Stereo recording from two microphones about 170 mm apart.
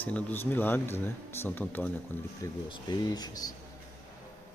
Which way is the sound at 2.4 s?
25° left (ahead or behind).